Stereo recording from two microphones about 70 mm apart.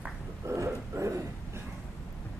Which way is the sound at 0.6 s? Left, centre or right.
Right.